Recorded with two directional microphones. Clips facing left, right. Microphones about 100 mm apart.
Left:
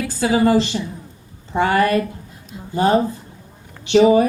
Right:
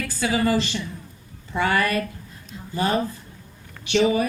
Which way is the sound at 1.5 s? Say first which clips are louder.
Left 6 dB; 25° left (ahead or behind).